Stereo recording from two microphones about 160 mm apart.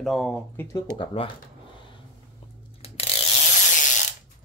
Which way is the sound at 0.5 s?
20° left (ahead or behind).